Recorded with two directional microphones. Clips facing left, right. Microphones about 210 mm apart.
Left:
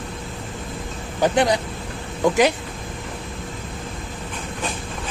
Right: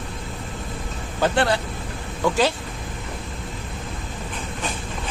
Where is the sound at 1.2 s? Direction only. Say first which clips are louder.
Left 2 dB; 15° left (ahead or behind).